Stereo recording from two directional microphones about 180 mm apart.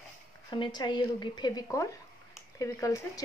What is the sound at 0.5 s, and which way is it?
Speech, 25° left (ahead or behind).